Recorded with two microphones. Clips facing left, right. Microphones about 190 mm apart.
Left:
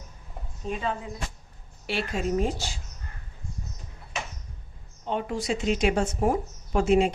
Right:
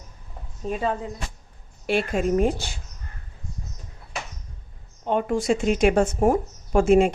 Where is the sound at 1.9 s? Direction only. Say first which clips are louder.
Right 6 dB; 55° right (ahead or behind).